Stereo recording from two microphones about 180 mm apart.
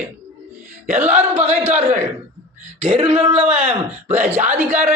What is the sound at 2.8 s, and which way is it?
Speech, 30° right (ahead or behind).